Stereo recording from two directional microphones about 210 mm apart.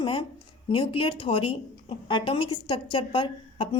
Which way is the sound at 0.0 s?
20° left (ahead or behind).